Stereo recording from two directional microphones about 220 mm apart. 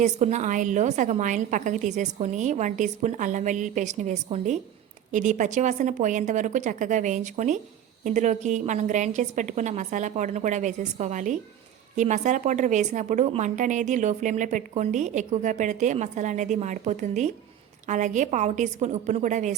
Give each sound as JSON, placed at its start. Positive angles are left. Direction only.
{"t": 0.0, "sound": "a woman's voice", "side_deg": -30}